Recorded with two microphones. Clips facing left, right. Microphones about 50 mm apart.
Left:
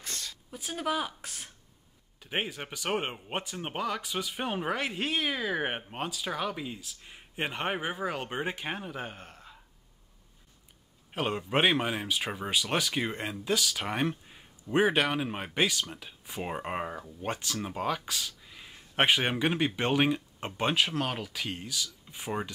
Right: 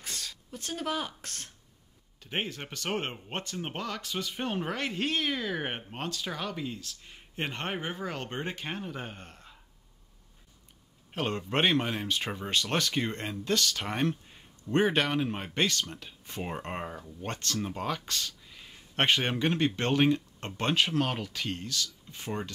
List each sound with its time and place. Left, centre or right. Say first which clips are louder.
0.1 s speech: even; centre
11.1 s speech: left 1 dB; centre